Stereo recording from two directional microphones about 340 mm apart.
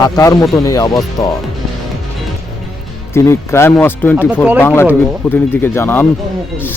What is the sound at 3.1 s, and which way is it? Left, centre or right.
Speech, centre.